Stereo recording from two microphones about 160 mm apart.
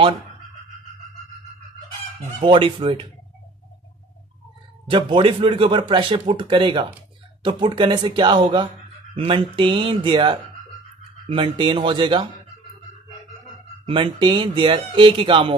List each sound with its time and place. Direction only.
2.4 s speech: 30° right (ahead or behind)
4.8 s speech: 35° right (ahead or behind)
13.8 s speech: 30° right (ahead or behind)